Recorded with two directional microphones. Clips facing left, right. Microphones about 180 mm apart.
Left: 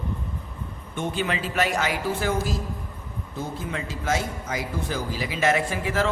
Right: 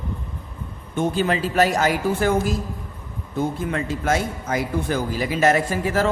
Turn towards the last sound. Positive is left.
turn(degrees=-40)  # may be behind; listen again after turning